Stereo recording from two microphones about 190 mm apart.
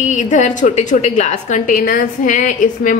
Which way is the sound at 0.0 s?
40° left (ahead or behind).